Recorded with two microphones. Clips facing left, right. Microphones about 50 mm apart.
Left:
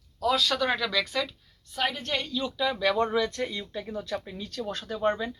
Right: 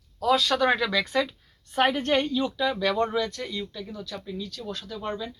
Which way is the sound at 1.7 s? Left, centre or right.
Right.